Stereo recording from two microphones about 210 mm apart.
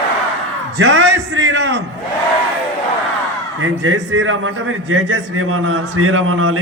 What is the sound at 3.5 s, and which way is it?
A man's voice, 70° right (ahead or behind).